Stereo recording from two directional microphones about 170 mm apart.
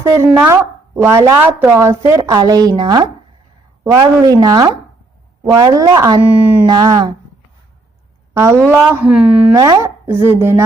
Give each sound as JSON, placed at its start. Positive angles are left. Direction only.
{"t": 0.0, "sound": "speech", "side_deg": -15}
{"t": 6.7, "sound": "speech", "side_deg": -25}
{"t": 8.3, "sound": "speech", "side_deg": -15}
{"t": 9.6, "sound": "speech", "side_deg": -20}